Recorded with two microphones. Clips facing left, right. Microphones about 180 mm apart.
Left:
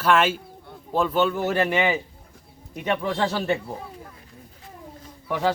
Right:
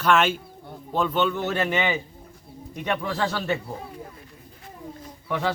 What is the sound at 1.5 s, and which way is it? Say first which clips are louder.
Speech: left 3 dB; 40° left (ahead or behind).